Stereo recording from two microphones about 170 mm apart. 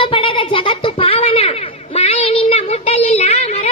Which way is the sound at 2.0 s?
35° left (ahead or behind).